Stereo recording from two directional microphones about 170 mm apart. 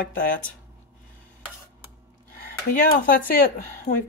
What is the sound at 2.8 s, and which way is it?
Speech, 55° left (ahead or behind).